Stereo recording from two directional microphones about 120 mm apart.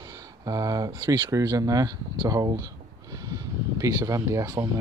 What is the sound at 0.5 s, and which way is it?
Speech, 30° right (ahead or behind).